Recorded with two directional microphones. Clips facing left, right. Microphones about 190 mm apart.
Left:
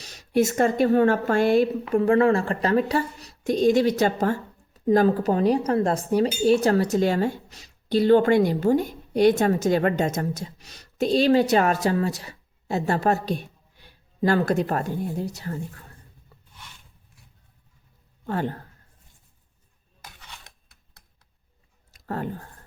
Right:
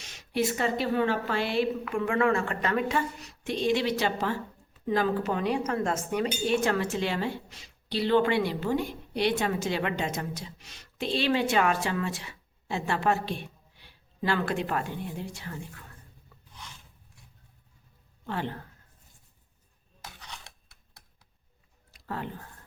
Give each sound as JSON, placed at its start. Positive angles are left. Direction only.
{"t": 0.0, "sound": "speech", "side_deg": 40}
{"t": 1.8, "sound": "a woman's voice", "side_deg": 35}
{"t": 18.3, "sound": "a woman's voice", "side_deg": 45}
{"t": 21.9, "sound": "a sound", "side_deg": 45}